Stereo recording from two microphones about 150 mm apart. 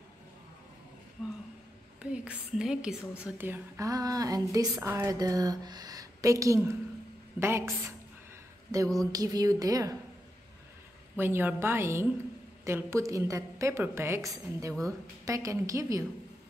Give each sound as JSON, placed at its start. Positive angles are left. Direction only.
{"t": 2.0, "sound": "a woman's voice", "side_deg": -5}
{"t": 11.1, "sound": "a woman's voice", "side_deg": -15}